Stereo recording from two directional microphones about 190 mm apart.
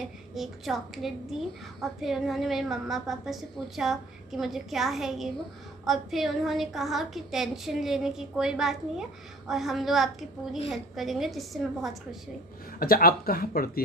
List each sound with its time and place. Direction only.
0.3 s a woman's voice: centre (ahead or behind)
12.7 s speech: 50° left (ahead or behind)